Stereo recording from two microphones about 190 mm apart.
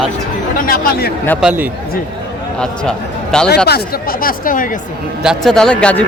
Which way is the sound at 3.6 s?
55° left (ahead or behind).